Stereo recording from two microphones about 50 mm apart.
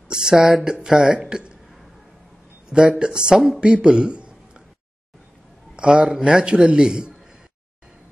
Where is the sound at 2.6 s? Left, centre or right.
Centre.